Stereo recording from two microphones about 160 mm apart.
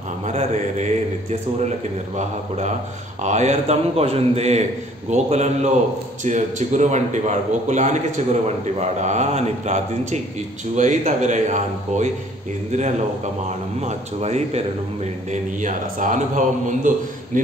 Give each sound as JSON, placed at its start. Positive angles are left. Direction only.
{"t": 0.3, "sound": "mantra", "side_deg": -45}
{"t": 2.1, "sound": "a man's voice", "side_deg": -45}
{"t": 13.7, "sound": "a man's voice", "side_deg": -45}
{"t": 15.6, "sound": "a man's voice", "side_deg": -55}